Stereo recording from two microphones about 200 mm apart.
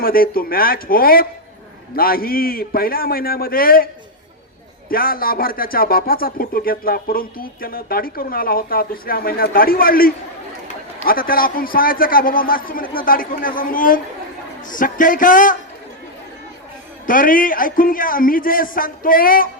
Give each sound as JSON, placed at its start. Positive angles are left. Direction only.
{"t": 0.0, "sound": "speech", "side_deg": 45}
{"t": 4.9, "sound": "speech", "side_deg": 45}
{"t": 17.1, "sound": "speech", "side_deg": 45}